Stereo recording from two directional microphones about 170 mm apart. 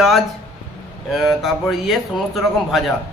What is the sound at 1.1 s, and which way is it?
A man's voice, centre (ahead or behind).